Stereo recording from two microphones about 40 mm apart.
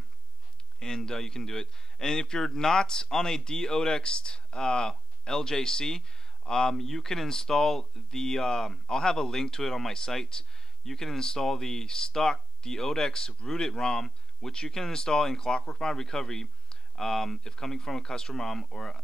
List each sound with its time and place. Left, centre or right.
0.7 s speech: centre